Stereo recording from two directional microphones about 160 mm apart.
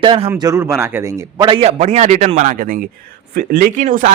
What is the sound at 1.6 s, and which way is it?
A man's voice, 45° right (ahead or behind).